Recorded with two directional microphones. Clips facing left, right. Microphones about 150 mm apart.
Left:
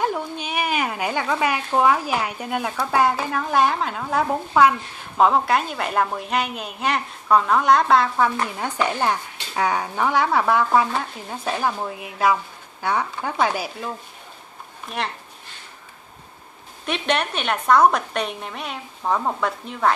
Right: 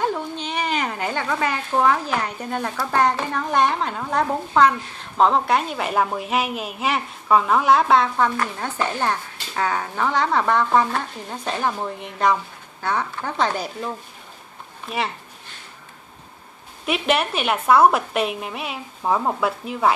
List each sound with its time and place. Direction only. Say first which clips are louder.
0.0 s a sound: even; 10° left (ahead or behind)
2.9 s a woman's voice: even; 5° left (ahead or behind)
8.5 s speech: left 1 dB; 15° left (ahead or behind)
16.8 s a woman's voice: right 2 dB; 5° right (ahead or behind)